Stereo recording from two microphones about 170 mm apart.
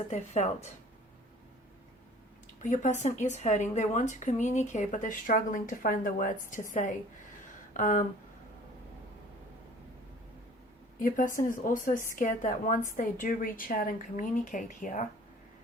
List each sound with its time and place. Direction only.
0.1 s speech: 40° left (ahead or behind)
2.6 s speech: 45° left (ahead or behind)
11.0 s speech: 50° left (ahead or behind)